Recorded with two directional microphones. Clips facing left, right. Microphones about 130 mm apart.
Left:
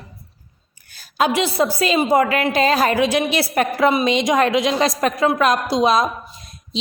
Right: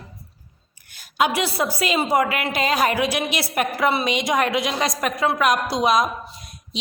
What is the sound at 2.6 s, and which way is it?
A woman's voice, 35° left (ahead or behind).